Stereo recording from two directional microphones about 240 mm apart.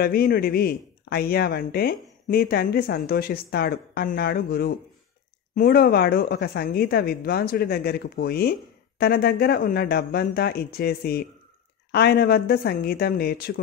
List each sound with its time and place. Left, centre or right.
0.0 s a woman's voice: left